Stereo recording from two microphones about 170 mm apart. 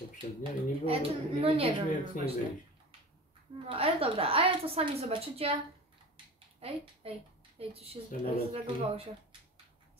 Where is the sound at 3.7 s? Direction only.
35° right (ahead or behind).